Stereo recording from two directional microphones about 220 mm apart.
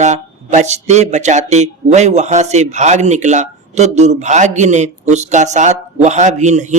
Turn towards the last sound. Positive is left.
turn(degrees=-35)  # may be behind; listen again after turning